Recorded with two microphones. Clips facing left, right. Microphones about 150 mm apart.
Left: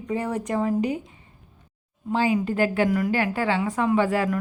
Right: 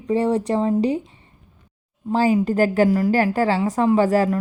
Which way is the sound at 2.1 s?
40° right (ahead or behind).